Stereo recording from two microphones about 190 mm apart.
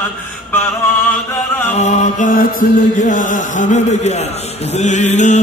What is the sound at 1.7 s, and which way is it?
Chant, 40° left (ahead or behind).